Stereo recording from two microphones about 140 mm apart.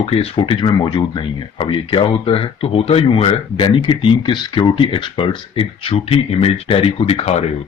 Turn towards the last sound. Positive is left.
turn(degrees=45)  # may be behind; listen again after turning